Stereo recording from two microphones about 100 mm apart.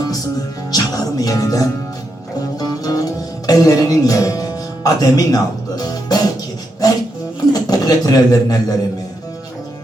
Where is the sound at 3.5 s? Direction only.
35° left (ahead or behind).